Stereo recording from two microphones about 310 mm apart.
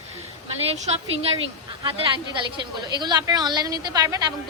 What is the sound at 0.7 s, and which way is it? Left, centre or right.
A woman's voice, centre.